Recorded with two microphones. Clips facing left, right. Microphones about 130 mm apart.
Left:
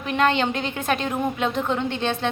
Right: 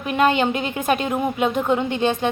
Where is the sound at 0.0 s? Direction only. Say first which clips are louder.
Right 3 dB; 10° right (ahead or behind).